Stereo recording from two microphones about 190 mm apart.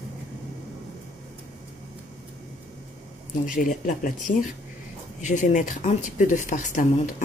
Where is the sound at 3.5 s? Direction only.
45° left (ahead or behind).